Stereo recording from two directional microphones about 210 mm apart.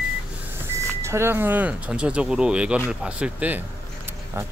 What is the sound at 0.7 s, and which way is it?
Speech, 10° right (ahead or behind).